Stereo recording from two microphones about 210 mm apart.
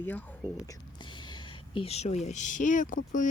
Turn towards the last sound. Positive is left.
turn(degrees=40)  # may be behind; listen again after turning